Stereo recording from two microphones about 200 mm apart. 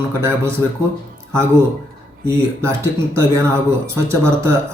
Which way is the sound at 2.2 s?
15° right (ahead or behind).